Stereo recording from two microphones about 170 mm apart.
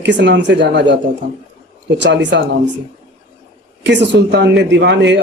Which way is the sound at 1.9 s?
90° right.